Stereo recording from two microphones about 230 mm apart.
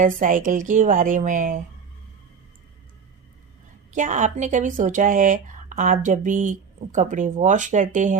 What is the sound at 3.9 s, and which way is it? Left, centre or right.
Speech, right.